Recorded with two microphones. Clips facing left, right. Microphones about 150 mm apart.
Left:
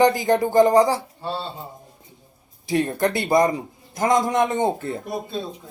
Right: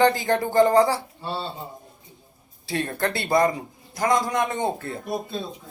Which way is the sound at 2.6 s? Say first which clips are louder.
Left 5 dB; 15° left (ahead or behind).